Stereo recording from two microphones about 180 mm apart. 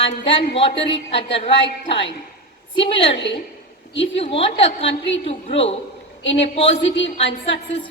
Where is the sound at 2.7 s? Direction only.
30° left (ahead or behind).